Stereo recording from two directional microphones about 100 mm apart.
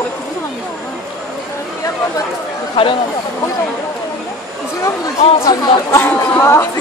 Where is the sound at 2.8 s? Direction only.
65° left (ahead or behind).